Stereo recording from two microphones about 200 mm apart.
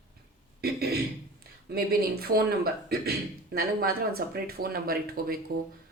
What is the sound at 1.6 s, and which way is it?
Speech, 50° right (ahead or behind).